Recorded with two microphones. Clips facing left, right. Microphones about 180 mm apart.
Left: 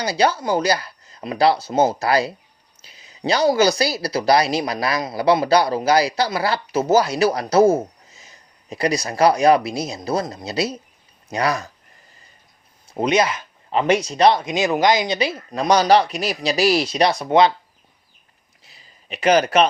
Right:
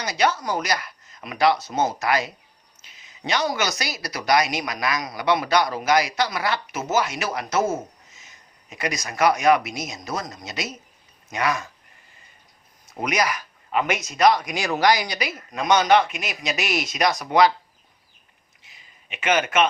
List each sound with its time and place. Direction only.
0.0 s speech: 30° left (ahead or behind)
12.9 s speech: 25° left (ahead or behind)
18.6 s a sound: 35° left (ahead or behind)